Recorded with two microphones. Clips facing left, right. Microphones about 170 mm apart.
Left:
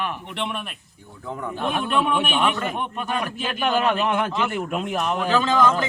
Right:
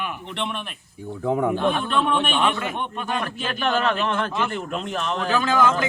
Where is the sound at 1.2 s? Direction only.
75° right (ahead or behind).